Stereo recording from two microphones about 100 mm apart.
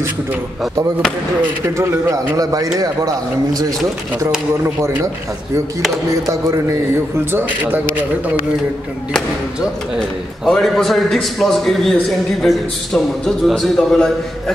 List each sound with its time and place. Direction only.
1.8 s a man's voice: 30° right (ahead or behind)
4.6 s speech: 25° right (ahead or behind)
6.2 s a man's voice: 35° right (ahead or behind)
7.3 s a man's voice: 20° right (ahead or behind)
9.9 s a man's voice: 5° left (ahead or behind)